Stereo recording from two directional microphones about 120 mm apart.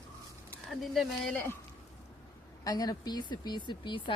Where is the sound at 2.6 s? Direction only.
35° left (ahead or behind).